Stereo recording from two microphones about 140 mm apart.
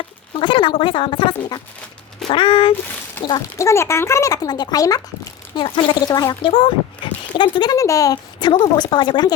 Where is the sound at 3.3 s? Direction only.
20° left (ahead or behind).